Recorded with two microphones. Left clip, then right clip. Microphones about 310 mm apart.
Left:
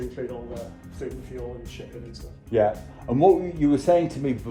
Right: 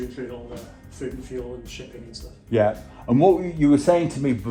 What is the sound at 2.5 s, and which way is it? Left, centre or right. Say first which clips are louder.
Speech: right 1 dB; right.